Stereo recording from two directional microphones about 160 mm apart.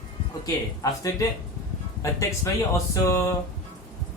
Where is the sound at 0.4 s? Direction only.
20° left (ahead or behind).